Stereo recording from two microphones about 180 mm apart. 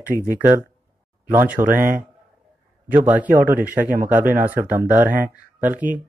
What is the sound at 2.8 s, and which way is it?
Speech, 10° right (ahead or behind).